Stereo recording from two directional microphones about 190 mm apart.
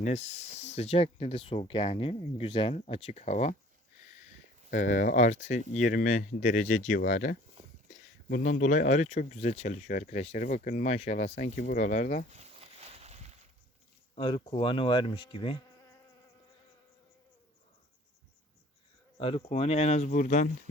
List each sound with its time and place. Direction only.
0.0 s speech: 35° left (ahead or behind)
4.7 s speech: 45° left (ahead or behind)
12.3 s a sound: 35° right (ahead or behind)
14.2 s speech: 25° left (ahead or behind)
19.1 s speech: 30° left (ahead or behind)